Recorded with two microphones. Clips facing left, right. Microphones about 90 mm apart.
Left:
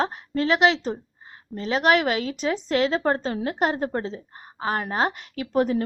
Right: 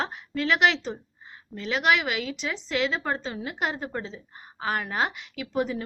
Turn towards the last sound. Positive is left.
turn(degrees=50)  # may be behind; listen again after turning